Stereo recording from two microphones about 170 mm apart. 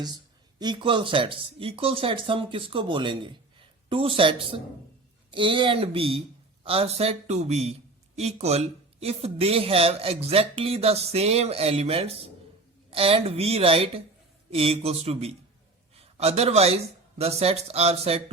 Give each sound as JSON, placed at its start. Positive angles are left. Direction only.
{"t": 0.6, "sound": "speech", "side_deg": -25}